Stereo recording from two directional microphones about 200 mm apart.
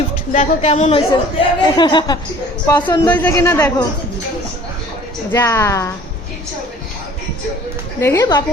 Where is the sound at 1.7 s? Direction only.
20° left (ahead or behind).